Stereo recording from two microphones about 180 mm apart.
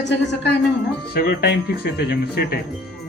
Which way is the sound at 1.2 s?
55° left (ahead or behind).